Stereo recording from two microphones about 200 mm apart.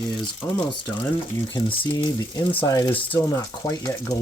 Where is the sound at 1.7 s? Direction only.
25° left (ahead or behind).